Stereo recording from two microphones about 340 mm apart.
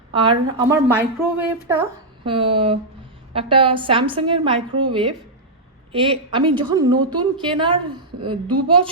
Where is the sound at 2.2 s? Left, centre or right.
Centre.